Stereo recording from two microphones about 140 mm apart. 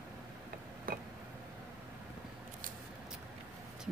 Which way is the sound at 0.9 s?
90° right.